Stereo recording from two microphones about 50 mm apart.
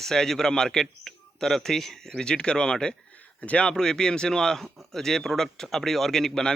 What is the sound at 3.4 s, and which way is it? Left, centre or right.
Speech, left.